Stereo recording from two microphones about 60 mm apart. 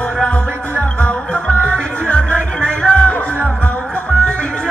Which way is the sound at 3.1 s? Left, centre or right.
Left.